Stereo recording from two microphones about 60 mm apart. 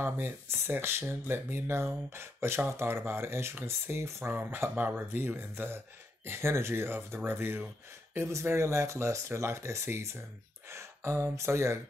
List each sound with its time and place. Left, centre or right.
0.0 s speech: right
8.3 s speech: right